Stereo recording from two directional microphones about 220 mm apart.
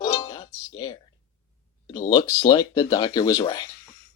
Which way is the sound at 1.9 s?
20° left (ahead or behind).